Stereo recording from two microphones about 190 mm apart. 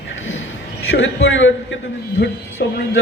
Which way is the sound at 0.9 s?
90° left.